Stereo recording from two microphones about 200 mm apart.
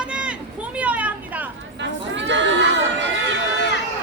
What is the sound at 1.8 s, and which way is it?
Speech, 65° right (ahead or behind).